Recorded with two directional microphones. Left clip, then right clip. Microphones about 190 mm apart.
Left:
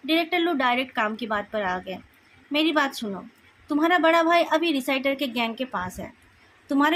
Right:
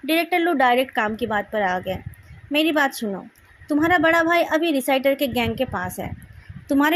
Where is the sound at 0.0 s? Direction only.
35° right (ahead or behind).